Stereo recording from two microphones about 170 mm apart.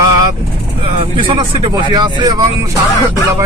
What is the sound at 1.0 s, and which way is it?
Speech, 30° right (ahead or behind).